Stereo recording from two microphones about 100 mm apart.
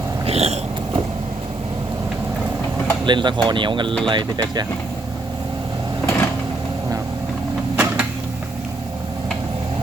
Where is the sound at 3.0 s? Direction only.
50° right (ahead or behind).